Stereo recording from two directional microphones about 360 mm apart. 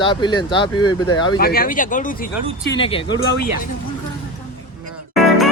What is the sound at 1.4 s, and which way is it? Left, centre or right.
Speech, left.